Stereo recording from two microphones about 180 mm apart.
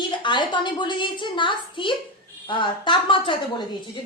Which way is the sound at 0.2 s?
25° left (ahead or behind).